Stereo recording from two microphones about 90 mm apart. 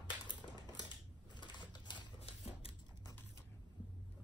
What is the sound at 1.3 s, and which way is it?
Typewriter, 60° left (ahead or behind).